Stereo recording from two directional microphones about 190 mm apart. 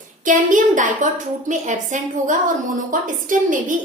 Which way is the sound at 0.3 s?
45° right (ahead or behind).